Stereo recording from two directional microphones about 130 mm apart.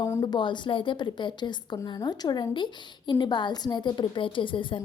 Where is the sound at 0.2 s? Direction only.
35° left (ahead or behind).